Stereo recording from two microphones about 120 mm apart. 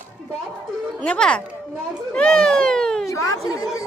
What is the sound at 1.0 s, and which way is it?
A woman's voice, 10° left (ahead or behind).